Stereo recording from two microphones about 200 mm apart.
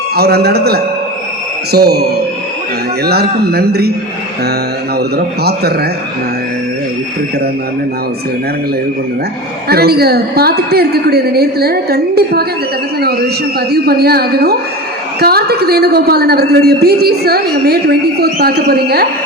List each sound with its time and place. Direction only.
0.2 s a woman's voice: 55° right (ahead or behind)
4.9 s a woman's voice: 50° right (ahead or behind)
9.6 s a woman's voice: 50° right (ahead or behind)